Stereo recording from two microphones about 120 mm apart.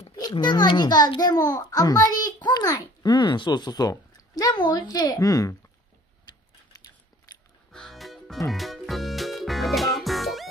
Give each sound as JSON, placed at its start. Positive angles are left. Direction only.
{"t": 0.4, "sound": "a child's voice", "side_deg": 40}
{"t": 6.2, "sound": "a sound", "side_deg": 30}
{"t": 7.7, "sound": "music", "side_deg": 0}